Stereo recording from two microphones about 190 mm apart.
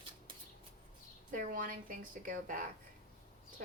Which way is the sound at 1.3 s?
45° right (ahead or behind).